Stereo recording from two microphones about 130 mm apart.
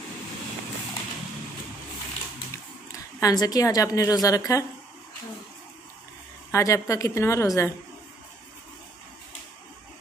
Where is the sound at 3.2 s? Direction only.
30° left (ahead or behind).